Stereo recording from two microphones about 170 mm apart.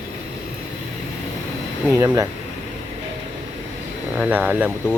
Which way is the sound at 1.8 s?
15° right (ahead or behind).